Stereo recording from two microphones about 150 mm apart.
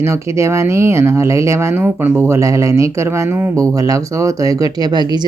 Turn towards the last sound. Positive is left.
turn(degrees=-25)  # may be behind; listen again after turning